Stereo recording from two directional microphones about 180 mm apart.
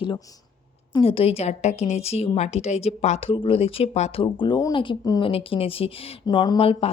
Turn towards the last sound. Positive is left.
turn(degrees=30)  # may be behind; listen again after turning